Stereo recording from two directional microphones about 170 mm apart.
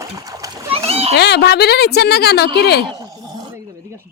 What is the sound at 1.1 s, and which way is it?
A woman's voice, 80° left.